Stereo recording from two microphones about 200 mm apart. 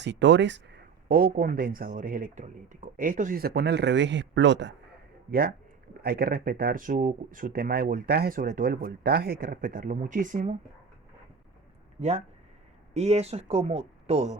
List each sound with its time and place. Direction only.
0.0 s speech: 60° right (ahead or behind)
6.0 s speech: 50° right (ahead or behind)
11.9 s speech: 35° right (ahead or behind)